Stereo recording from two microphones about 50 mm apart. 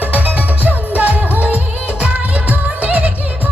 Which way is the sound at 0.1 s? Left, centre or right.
Right.